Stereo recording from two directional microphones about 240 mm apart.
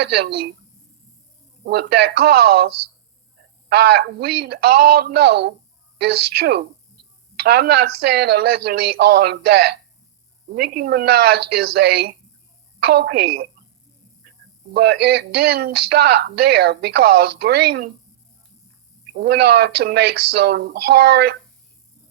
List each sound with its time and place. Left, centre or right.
0.0 s speech: right
1.6 s speech: right
3.7 s speech: right
14.7 s speech: right
19.1 s speech: right